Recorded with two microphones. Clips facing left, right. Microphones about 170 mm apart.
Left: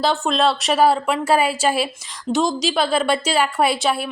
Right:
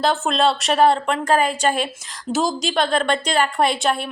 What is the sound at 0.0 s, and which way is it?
A woman's voice, centre (ahead or behind).